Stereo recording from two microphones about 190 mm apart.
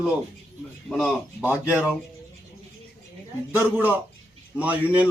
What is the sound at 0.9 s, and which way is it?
Speech, centre (ahead or behind).